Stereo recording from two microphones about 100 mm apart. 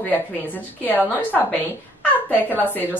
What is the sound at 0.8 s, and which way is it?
A woman's voice, 15° left (ahead or behind).